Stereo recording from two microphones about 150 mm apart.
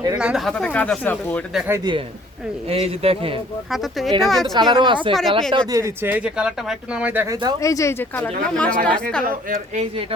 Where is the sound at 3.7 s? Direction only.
Centre (ahead or behind).